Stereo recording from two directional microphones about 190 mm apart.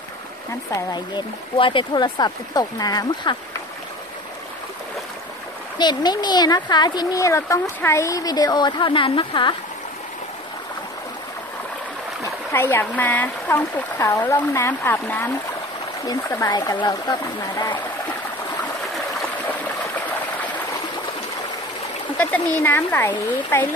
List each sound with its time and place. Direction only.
0.7 s speech: 20° left (ahead or behind)
5.8 s speech: 20° left (ahead or behind)
12.5 s speech: 10° left (ahead or behind)
22.2 s speech: 10° left (ahead or behind)